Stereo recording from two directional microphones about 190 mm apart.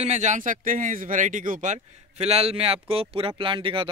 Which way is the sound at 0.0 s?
40° right (ahead or behind).